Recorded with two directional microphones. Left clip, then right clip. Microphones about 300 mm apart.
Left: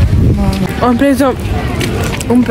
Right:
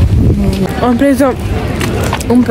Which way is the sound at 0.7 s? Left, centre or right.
Centre.